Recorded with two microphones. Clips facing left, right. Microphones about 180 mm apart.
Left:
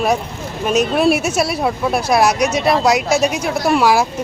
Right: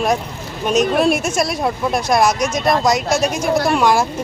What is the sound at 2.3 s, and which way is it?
Speech, 65° left (ahead or behind).